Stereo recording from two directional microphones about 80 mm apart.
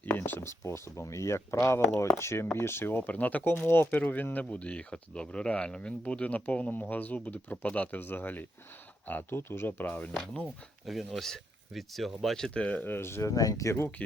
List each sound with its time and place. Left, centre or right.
0.3 s speech: left
10.4 s speech: centre
12.5 s speech: centre
13.3 s speech: left